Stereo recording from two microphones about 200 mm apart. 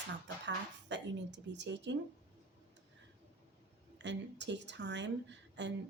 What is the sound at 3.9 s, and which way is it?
A woman's voice, 60° right (ahead or behind).